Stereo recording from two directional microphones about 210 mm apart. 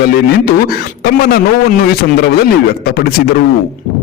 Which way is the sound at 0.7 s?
45° left (ahead or behind).